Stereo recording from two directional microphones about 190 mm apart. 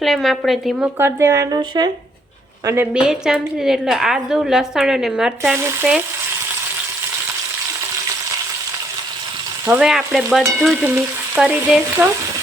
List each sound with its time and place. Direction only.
0.0 s a woman's voice: centre (ahead or behind)
0.9 s speech: 15° right (ahead or behind)
2.6 s a woman's voice: 10° right (ahead or behind)
9.6 s a woman's voice: 5° right (ahead or behind)